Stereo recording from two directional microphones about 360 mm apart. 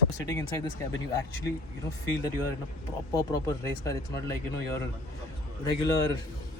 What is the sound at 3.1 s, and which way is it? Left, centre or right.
Speech, centre.